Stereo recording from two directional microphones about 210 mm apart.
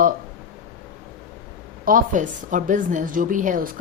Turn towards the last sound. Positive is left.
turn(degrees=-40)  # may be behind; listen again after turning